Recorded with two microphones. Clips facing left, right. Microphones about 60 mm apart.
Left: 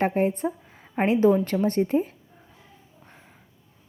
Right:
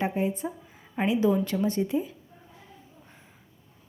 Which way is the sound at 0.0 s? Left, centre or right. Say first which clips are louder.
Left 5 dB; left.